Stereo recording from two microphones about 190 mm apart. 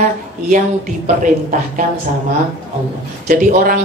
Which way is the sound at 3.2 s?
45° right (ahead or behind).